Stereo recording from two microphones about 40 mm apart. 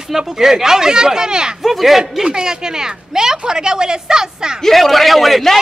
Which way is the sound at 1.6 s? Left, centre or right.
Centre.